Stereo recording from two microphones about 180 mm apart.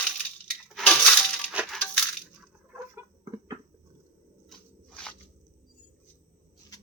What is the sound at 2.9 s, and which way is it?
Chicken, 20° right (ahead or behind).